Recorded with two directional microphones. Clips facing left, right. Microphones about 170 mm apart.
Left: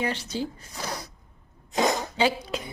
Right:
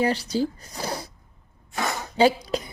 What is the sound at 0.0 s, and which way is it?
Speech, 35° right (ahead or behind).